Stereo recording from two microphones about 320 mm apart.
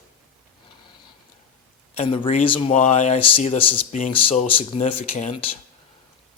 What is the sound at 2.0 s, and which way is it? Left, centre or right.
Speech, centre.